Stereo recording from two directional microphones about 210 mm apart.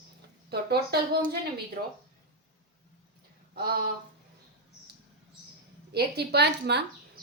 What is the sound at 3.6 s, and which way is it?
Speech, 45° right (ahead or behind).